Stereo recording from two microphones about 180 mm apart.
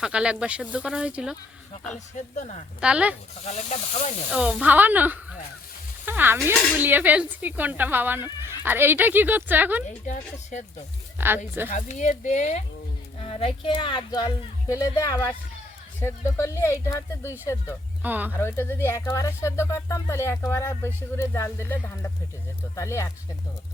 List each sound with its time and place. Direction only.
0.0 s speech: 5° right (ahead or behind)
2.1 s speech: 40° left (ahead or behind)
2.8 s speech: 5° right (ahead or behind)
3.4 s speech: 35° left (ahead or behind)
4.3 s speech: 5° right (ahead or behind)
11.2 s speech: 10° right (ahead or behind)
11.7 s speech: 40° left (ahead or behind); by 17.7 s 15° left (ahead or behind)
18.0 s speech: 10° right (ahead or behind)
18.3 s speech: 15° left (ahead or behind)